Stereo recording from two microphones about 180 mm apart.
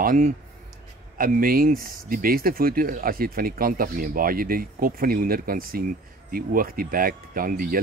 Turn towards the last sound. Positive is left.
turn(degrees=-50)  # may be behind; listen again after turning